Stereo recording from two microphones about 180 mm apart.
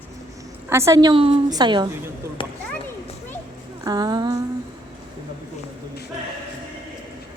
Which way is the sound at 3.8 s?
20° right (ahead or behind).